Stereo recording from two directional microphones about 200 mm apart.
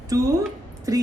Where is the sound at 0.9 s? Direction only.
15° right (ahead or behind).